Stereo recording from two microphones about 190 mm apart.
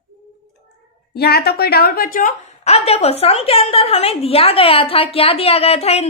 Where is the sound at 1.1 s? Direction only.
55° left (ahead or behind).